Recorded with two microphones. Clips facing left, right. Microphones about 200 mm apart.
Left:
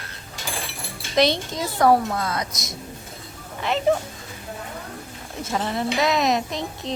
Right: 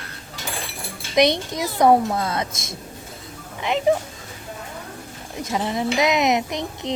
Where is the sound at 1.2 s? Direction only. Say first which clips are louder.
Right 2 dB; 20° right (ahead or behind).